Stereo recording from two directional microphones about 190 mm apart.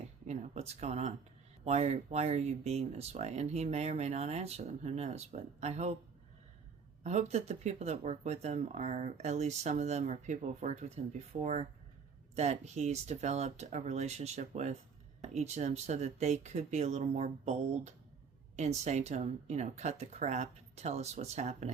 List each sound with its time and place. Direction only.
0.3 s speech: 35° right (ahead or behind)
7.0 s speech: 35° right (ahead or behind)